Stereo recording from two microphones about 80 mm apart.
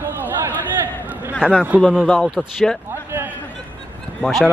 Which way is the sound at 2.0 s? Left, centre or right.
Centre.